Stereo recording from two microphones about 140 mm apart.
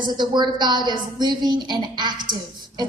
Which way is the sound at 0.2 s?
30° right (ahead or behind).